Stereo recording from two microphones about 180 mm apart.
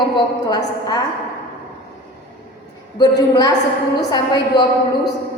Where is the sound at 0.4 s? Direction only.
25° left (ahead or behind).